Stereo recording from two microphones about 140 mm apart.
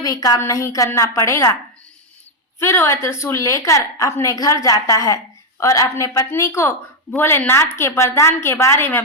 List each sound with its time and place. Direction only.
0.0 s a woman's voice: 25° left (ahead or behind)
2.6 s a woman's voice: 20° left (ahead or behind)